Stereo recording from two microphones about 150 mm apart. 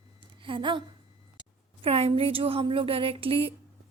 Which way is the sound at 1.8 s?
40° right (ahead or behind).